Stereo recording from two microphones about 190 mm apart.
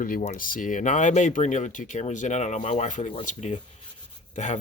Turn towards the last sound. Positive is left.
turn(degrees=40)  # may be behind; listen again after turning